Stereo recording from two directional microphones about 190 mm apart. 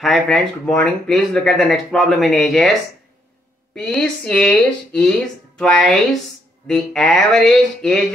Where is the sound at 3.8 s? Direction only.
5° left (ahead or behind).